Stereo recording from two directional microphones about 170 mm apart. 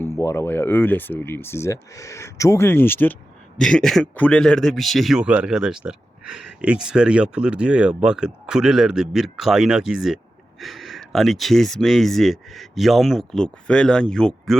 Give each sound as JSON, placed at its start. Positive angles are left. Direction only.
{"t": 0.0, "sound": "a man's voice", "side_deg": 15}